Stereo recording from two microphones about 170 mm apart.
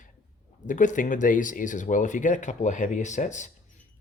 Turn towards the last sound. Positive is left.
turn(degrees=45)  # may be behind; listen again after turning